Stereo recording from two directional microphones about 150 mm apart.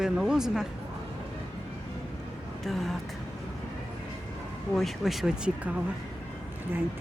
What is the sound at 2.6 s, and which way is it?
Speech, centre (ahead or behind).